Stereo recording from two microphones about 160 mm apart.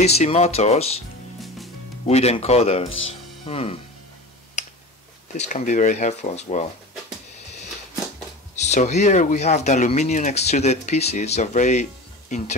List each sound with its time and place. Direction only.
0.0 s speech: 40° left (ahead or behind)
2.0 s speech: 40° left (ahead or behind)
5.4 s speech: 50° left (ahead or behind)
8.5 s speech: 45° left (ahead or behind)